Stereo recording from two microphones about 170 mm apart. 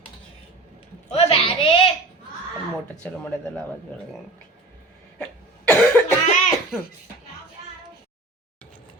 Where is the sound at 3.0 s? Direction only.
10° left (ahead or behind).